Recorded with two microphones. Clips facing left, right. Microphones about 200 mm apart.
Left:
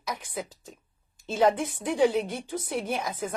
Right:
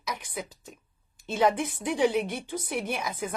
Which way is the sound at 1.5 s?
15° right (ahead or behind).